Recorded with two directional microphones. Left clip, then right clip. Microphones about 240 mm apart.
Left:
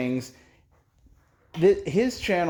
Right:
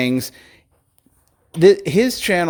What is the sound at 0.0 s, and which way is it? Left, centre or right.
A man's voice, right.